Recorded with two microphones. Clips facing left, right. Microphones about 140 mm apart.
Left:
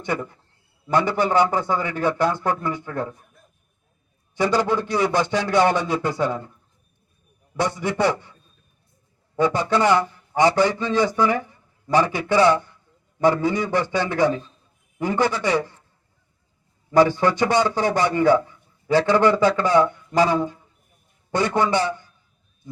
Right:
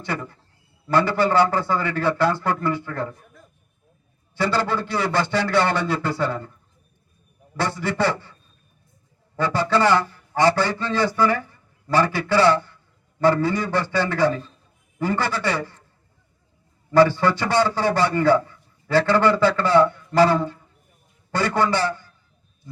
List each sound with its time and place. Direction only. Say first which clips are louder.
0.9 s a man's voice: right 1 dB; 20° left (ahead or behind)
4.4 s a man's voice: left 2 dB; 15° left (ahead or behind)
7.5 s a man's voice: left 1 dB; 15° left (ahead or behind)
16.9 s a man's voice: even; 15° left (ahead or behind)